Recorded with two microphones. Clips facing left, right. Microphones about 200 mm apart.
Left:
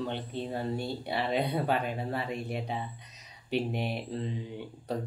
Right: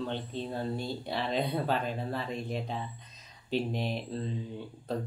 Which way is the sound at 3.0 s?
65° left (ahead or behind).